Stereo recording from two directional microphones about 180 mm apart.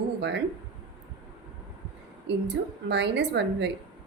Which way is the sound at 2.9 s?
75° right (ahead or behind).